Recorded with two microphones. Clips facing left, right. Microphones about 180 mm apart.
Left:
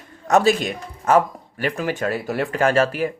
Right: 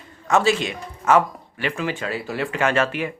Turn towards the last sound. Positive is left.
turn(degrees=40)  # may be behind; listen again after turning